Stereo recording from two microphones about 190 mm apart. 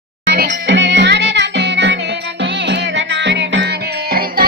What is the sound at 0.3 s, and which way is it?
Music, 65° right (ahead or behind).